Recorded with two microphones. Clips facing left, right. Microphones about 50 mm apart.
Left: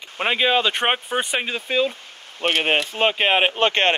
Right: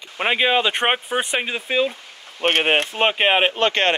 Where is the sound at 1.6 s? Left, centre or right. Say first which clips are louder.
Even; right.